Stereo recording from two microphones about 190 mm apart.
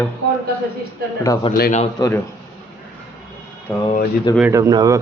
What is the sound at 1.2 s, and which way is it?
Speech, 20° left (ahead or behind).